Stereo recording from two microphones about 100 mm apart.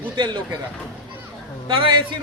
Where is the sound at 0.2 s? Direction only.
45° right (ahead or behind).